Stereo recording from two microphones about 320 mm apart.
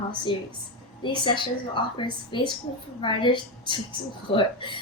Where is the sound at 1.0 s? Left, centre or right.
Centre.